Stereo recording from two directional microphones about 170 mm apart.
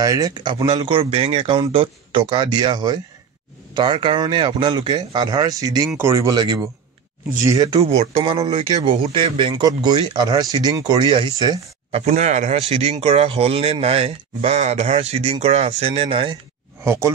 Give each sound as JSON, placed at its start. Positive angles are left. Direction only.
{"t": 0.0, "sound": "speech", "side_deg": -20}
{"t": 7.8, "sound": "speech", "side_deg": -35}
{"t": 11.9, "sound": "speech", "side_deg": -40}